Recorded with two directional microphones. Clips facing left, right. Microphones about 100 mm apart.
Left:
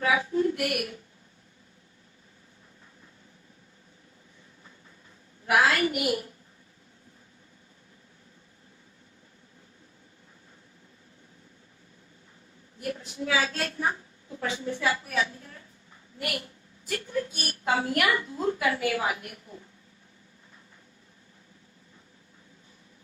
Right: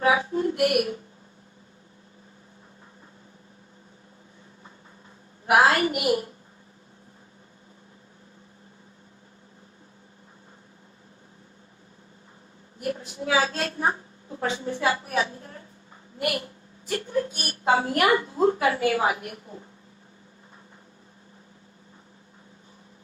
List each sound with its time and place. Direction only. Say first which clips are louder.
0.0 s a sound: right 2 dB; 30° right (ahead or behind)
5.5 s a woman's voice: right 4 dB; 35° right (ahead or behind)
12.8 s a woman's voice: right 3 dB; 30° right (ahead or behind)